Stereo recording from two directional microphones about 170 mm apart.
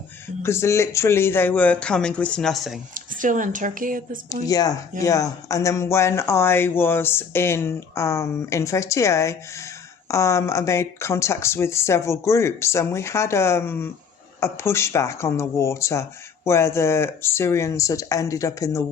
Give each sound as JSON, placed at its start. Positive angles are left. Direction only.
{"t": 0.4, "sound": "speech", "side_deg": 15}
{"t": 2.9, "sound": "speech", "side_deg": -50}
{"t": 4.4, "sound": "speech", "side_deg": 20}